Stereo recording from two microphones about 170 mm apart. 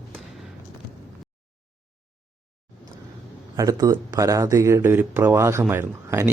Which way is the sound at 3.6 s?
20° right (ahead or behind).